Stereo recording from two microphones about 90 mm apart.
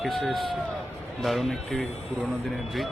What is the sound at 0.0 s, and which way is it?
Speech, centre (ahead or behind).